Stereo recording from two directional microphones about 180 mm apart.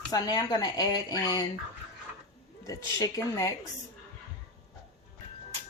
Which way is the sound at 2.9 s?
20° left (ahead or behind).